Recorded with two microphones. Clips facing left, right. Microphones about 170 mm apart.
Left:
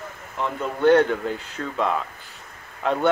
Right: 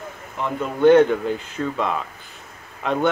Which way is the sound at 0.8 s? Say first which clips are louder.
Right 4 dB; 15° right (ahead or behind).